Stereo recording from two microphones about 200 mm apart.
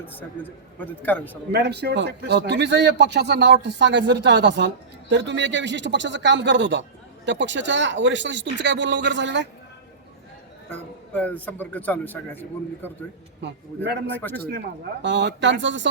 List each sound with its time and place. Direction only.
0.0 s a man's voice: 10° left (ahead or behind)
1.5 s speech: 55° right (ahead or behind)
11.1 s a man's voice: 10° left (ahead or behind)
13.4 s speech: 55° right (ahead or behind)
14.2 s a man's voice: 10° left (ahead or behind)
15.0 s speech: 60° right (ahead or behind)